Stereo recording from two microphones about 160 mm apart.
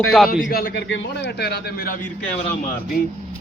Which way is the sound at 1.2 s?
85° left.